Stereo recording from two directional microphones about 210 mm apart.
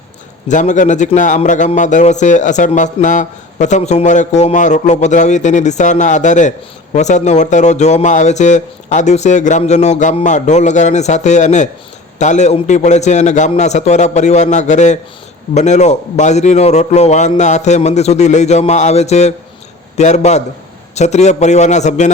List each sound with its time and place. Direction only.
0.4 s a man's voice: 35° left (ahead or behind)